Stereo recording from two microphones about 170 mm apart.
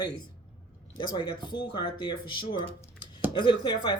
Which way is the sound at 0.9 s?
25° left (ahead or behind).